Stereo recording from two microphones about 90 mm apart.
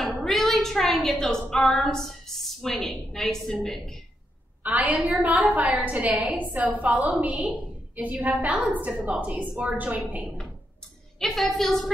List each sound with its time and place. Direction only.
0.0 s a sound: centre (ahead or behind)
1.0 s a woman's voice: 5° left (ahead or behind)
4.6 s a woman's voice: 15° right (ahead or behind)
11.1 s a woman's voice: 5° left (ahead or behind)